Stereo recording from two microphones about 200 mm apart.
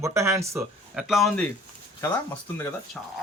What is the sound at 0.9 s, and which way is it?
Speech, centre (ahead or behind).